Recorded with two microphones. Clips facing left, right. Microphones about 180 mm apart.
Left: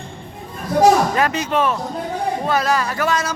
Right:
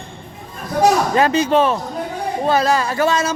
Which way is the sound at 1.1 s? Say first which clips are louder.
Right 4 dB; 30° right (ahead or behind).